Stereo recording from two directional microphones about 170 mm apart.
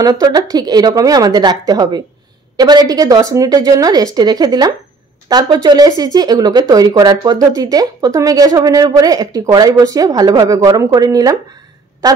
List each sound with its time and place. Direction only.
0.0 s speech: 20° right (ahead or behind)